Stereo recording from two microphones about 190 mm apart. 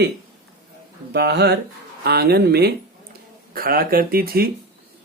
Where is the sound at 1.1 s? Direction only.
60° right (ahead or behind).